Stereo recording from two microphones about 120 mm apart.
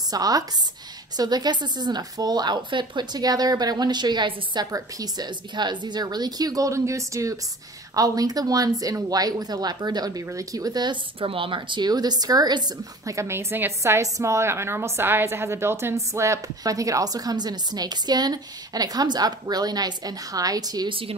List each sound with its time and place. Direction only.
0.1 s speech: 30° right (ahead or behind)
20.9 s speech: 50° right (ahead or behind)